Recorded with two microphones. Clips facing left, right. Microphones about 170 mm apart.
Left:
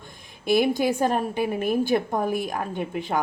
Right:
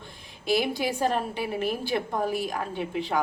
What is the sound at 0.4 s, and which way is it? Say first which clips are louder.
A woman's voice: left 5 dB; 50° left (ahead or behind).